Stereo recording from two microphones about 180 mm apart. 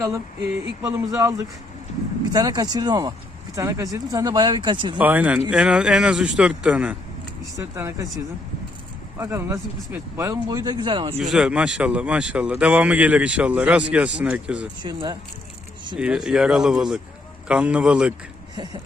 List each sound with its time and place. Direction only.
0.8 s speech: 15° right (ahead or behind)
4.9 s speech: 10° right (ahead or behind)
9.1 s speech: 15° right (ahead or behind)
11.2 s speech: 5° right (ahead or behind)
14.8 s speech: 25° right (ahead or behind)
16.0 s speech: 5° right (ahead or behind)
18.5 s a sound: 25° right (ahead or behind)